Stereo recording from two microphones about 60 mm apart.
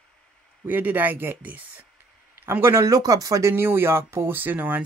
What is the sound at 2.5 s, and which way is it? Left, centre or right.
Speech, right.